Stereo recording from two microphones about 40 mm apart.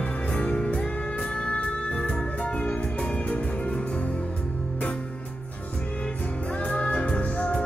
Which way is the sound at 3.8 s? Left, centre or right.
Left.